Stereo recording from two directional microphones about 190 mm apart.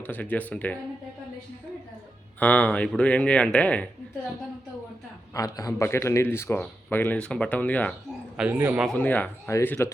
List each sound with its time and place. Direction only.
0.0 s speech: 10° left (ahead or behind)
2.4 s speech: 5° left (ahead or behind)
5.3 s speech: 20° left (ahead or behind)
8.4 s a man's voice: 10° right (ahead or behind)
8.9 s speech: 10° left (ahead or behind)